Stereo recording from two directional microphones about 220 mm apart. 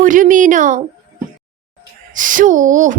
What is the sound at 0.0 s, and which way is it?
Speech, 35° right (ahead or behind).